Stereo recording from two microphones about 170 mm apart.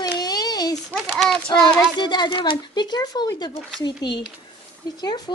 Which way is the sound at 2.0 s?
25° left (ahead or behind).